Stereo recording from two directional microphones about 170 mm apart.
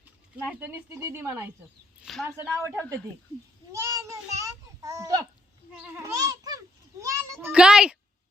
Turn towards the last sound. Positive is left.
turn(degrees=-5)  # may be behind; listen again after turning